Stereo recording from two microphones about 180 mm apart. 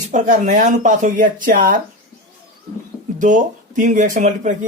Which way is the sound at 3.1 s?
45° right (ahead or behind).